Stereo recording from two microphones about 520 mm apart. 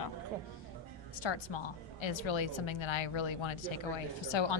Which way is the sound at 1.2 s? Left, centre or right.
Left.